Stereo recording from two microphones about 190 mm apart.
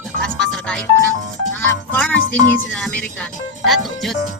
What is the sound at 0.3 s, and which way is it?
Music, 5° left (ahead or behind).